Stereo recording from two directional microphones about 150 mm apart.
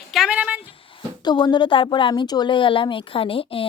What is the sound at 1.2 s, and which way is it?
A woman's voice, 30° left (ahead or behind).